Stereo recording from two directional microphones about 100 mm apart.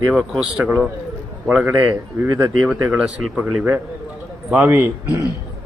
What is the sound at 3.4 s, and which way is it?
A man's voice, 20° right (ahead or behind).